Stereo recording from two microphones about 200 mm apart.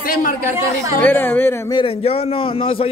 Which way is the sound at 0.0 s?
45° left (ahead or behind).